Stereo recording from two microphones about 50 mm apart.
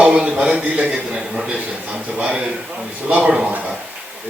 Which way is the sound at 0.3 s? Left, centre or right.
Right.